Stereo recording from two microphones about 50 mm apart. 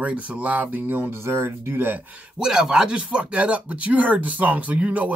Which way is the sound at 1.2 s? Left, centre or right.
Right.